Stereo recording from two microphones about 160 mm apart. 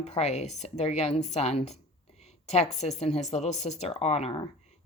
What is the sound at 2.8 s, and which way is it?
Speech, 45° left (ahead or behind).